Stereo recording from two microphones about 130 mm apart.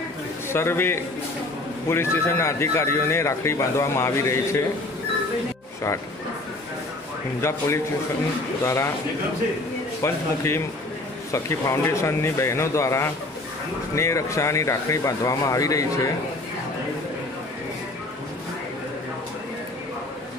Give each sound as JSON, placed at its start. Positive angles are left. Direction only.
{"t": 0.5, "sound": "speech", "side_deg": 20}
{"t": 7.4, "sound": "speech", "side_deg": 20}
{"t": 10.0, "sound": "speech", "side_deg": 20}